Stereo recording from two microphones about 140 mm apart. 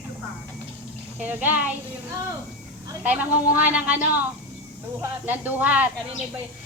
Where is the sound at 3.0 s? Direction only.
10° right (ahead or behind).